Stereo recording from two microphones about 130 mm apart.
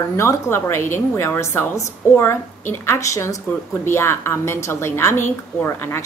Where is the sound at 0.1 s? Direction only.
20° left (ahead or behind).